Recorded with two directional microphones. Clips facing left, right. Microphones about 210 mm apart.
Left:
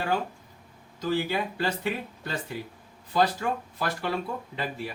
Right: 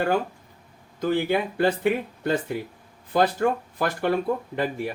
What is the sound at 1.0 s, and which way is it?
Speech, 55° right (ahead or behind).